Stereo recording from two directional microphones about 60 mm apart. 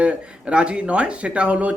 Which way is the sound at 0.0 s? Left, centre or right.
Centre.